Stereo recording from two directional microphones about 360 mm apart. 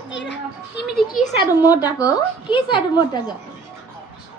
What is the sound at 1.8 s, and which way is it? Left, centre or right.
A woman's voice, centre.